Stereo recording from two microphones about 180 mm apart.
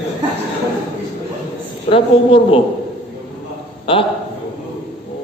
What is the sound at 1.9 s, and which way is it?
Speech, 30° left (ahead or behind).